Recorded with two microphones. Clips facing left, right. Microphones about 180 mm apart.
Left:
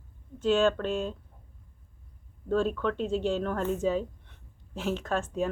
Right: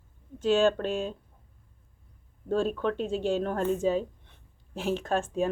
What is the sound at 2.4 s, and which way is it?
Speech, 15° right (ahead or behind).